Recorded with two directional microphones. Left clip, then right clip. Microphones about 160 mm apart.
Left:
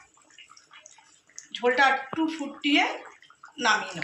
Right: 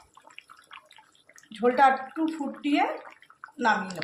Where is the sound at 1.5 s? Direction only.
90° right.